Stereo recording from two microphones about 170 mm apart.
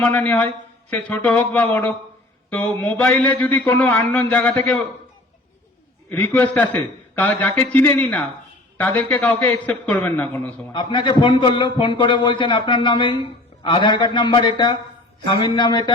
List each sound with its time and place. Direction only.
0.0 s a man's voice: 10° left (ahead or behind)
6.1 s a man's voice: 10° left (ahead or behind)
10.7 s a man's voice: 30° left (ahead or behind)